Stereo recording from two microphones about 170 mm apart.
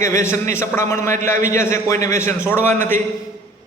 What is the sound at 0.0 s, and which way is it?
A man's voice, 15° left (ahead or behind).